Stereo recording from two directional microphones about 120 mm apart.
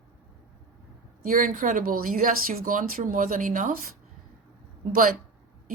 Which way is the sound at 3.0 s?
90° right.